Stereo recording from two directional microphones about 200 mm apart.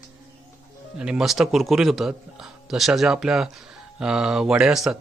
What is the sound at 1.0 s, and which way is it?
Speech, 5° right (ahead or behind).